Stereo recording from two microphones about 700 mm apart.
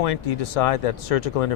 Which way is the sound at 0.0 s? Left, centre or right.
Left.